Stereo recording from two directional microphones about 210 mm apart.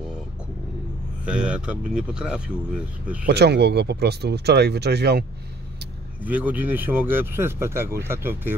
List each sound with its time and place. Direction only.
1.2 s speech: 5° right (ahead or behind)
3.3 s speech: 50° right (ahead or behind)
6.2 s speech: 10° right (ahead or behind)